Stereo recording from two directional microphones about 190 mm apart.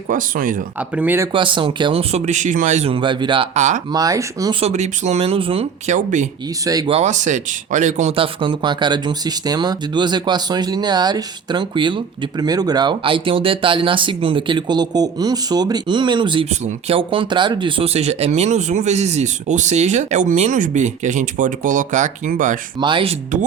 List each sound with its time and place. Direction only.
0.1 s speech: 45° right (ahead or behind)
0.8 s speech: 10° right (ahead or behind)
1.3 s speech: 25° right (ahead or behind)
3.9 s speech: 20° right (ahead or behind)
4.6 s speech: 35° right (ahead or behind)
6.7 s speech: 20° right (ahead or behind)
6.9 s speech: 40° right (ahead or behind)
22.8 s speech: 25° right (ahead or behind)